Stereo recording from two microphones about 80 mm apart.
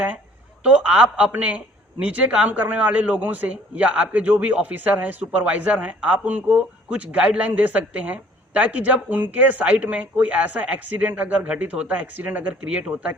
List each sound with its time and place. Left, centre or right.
0.6 s a man's voice: centre